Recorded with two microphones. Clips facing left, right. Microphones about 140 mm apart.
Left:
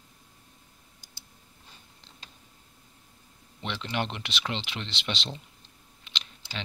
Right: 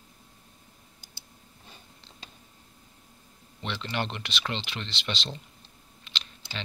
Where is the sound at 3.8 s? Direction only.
15° left (ahead or behind).